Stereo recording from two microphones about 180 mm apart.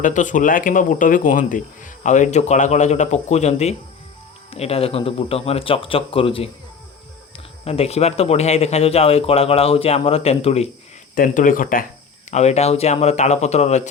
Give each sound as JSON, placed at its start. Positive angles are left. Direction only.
{"t": 0.0, "sound": "speech", "side_deg": 45}
{"t": 7.6, "sound": "speech", "side_deg": 35}
{"t": 11.1, "sound": "speech", "side_deg": 50}
{"t": 12.3, "sound": "speech", "side_deg": 40}